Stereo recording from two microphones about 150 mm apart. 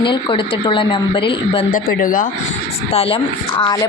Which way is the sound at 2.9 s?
40° left (ahead or behind).